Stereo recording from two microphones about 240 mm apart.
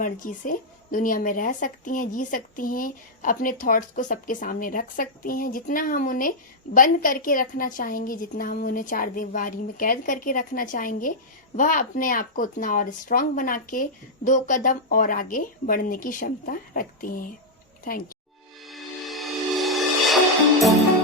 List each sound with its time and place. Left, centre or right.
0.0 s speech: left
18.6 s music: centre